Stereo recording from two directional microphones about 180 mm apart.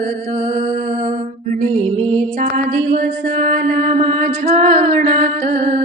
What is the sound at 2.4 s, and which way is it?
Mantra, 45° right (ahead or behind).